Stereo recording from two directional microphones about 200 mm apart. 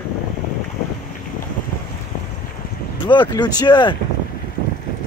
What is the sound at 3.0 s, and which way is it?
Speech, 20° left (ahead or behind).